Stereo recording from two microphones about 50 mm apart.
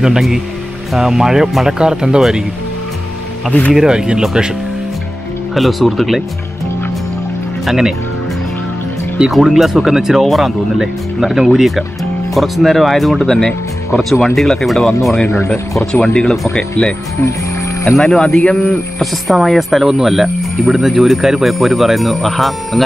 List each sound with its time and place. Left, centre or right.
0.0 s speech: centre
3.7 s speech: centre
5.5 s speech: centre
7.6 s speech: centre
9.3 s speech: centre
13.3 s speech: centre
15.2 s speech: left
15.9 s speech: centre
18.0 s speech: centre
18.9 s speech: centre